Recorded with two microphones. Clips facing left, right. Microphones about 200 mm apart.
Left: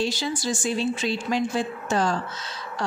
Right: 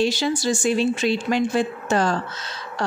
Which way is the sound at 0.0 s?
75° right (ahead or behind).